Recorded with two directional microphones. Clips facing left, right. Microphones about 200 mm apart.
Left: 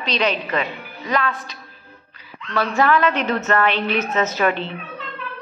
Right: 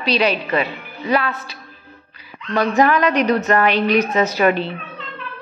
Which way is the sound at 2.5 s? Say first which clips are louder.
Right 3 dB; 15° right (ahead or behind).